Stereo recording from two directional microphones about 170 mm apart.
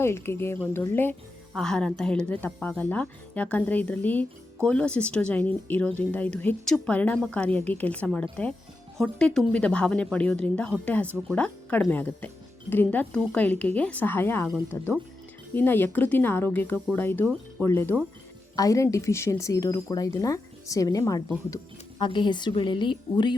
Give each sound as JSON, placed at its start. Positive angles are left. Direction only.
{"t": 0.0, "sound": "speech", "side_deg": 15}
{"t": 1.5, "sound": "a woman's voice", "side_deg": 5}